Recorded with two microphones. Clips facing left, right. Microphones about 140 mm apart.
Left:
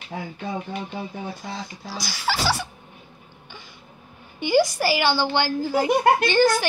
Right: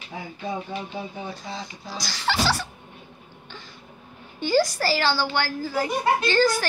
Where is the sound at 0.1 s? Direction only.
40° left (ahead or behind).